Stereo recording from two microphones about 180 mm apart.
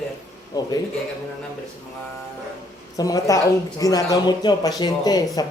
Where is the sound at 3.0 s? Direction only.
20° left (ahead or behind).